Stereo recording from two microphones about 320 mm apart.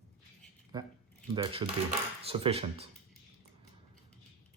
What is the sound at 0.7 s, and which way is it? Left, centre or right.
Speech, centre.